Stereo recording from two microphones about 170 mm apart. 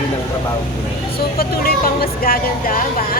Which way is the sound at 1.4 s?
60° left (ahead or behind).